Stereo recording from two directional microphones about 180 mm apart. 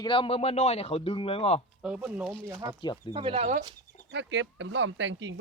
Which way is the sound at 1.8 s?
5° right (ahead or behind).